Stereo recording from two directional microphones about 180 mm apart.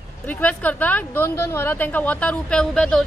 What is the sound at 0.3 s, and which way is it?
Speech, 10° left (ahead or behind).